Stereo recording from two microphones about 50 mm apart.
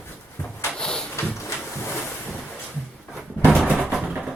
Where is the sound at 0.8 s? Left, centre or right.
Centre.